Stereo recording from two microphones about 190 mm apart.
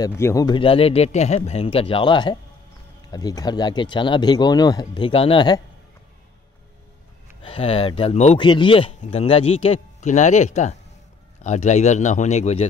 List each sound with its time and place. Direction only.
0.0 s speech: 15° left (ahead or behind)
7.4 s a man's voice: 30° left (ahead or behind)